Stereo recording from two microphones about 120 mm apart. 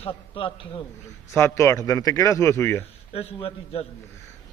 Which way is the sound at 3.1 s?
55° left (ahead or behind).